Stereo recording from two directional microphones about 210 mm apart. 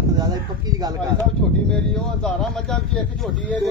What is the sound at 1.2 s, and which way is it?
Speech, 5° left (ahead or behind).